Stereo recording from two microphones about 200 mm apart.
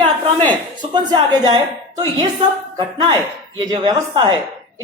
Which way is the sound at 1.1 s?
20° right (ahead or behind).